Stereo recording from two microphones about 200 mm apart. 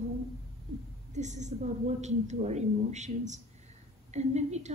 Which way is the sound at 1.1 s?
35° right (ahead or behind).